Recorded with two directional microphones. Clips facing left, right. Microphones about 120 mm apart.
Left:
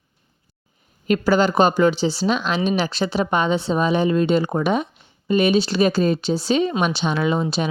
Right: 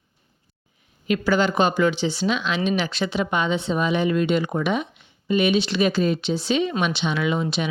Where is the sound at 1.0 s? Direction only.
40° left (ahead or behind).